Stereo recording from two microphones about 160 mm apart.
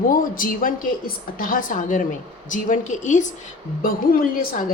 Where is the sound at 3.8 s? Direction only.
60° left (ahead or behind).